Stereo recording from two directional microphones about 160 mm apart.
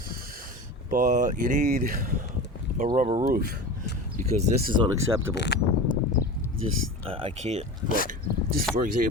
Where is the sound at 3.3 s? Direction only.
70° right (ahead or behind).